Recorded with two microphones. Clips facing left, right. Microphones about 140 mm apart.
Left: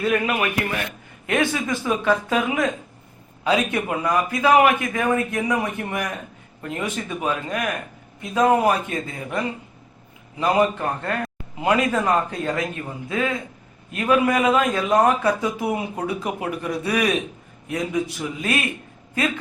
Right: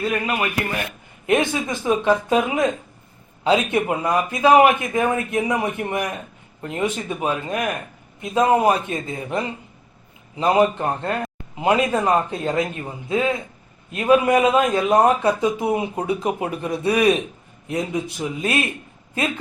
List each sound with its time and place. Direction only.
0.0 s a man's voice: 5° right (ahead or behind)
1.3 s a man's voice: 20° right (ahead or behind)